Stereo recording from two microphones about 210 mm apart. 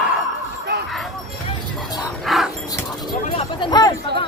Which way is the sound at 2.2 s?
Centre (ahead or behind).